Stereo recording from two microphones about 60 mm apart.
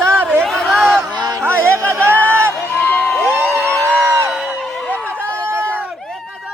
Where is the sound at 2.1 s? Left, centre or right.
Left.